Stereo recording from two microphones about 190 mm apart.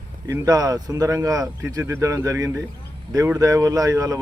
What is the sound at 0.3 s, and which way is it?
Speech, 20° right (ahead or behind).